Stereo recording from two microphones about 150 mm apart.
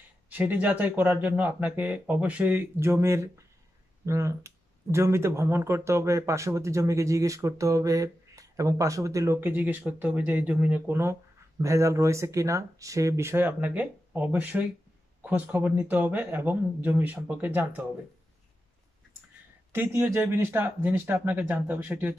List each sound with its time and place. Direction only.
0.3 s speech: 10° right (ahead or behind)
19.7 s speech: 15° right (ahead or behind)